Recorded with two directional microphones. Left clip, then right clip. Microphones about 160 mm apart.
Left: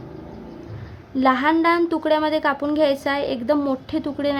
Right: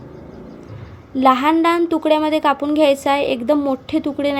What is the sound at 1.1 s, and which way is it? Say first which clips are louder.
A woman's voice: right 4 dB; 10° right (ahead or behind).